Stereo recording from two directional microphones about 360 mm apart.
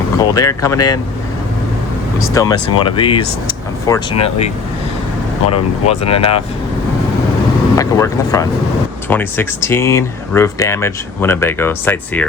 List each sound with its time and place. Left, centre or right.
0.2 s speech: centre
2.3 s speech: centre
7.8 s speech: centre